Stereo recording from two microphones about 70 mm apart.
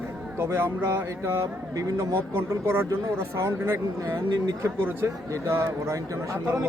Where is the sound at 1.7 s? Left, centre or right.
Right.